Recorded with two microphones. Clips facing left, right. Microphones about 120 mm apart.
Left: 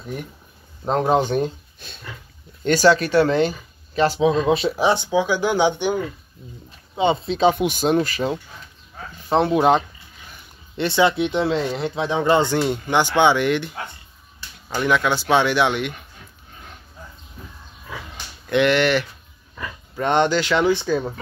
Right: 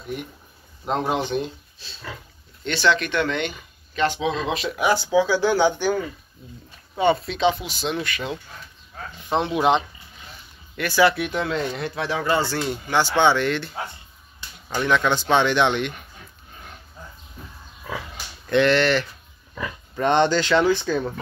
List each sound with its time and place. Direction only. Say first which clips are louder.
0.8 s speech: left 5 dB; 35° left (ahead or behind); by 5.9 s 15° left (ahead or behind)
7.0 s speech: even; 25° left (ahead or behind)
7.3 s speech: left 4 dB; 45° left (ahead or behind)
10.8 s speech: left 1 dB; 25° left (ahead or behind); by 15.9 s 10° left (ahead or behind)
18.5 s speech: left 1 dB; 15° left (ahead or behind)
20.1 s speech: even; 10° left (ahead or behind)